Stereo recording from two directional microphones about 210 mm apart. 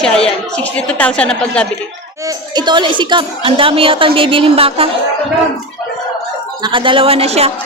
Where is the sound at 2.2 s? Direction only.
20° right (ahead or behind).